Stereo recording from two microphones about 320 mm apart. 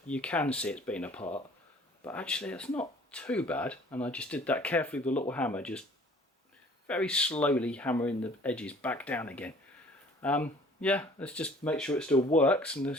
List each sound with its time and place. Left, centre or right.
0.1 s speech: centre
6.8 s speech: centre